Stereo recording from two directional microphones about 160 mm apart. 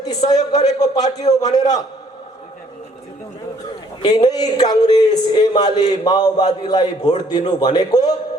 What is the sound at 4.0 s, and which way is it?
A man's voice, 25° left (ahead or behind).